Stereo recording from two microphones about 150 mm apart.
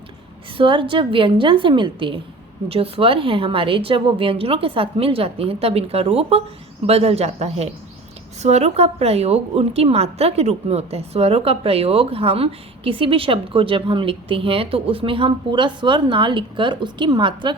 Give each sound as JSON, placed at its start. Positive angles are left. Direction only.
{"t": 0.5, "sound": "a woman's voice", "side_deg": -35}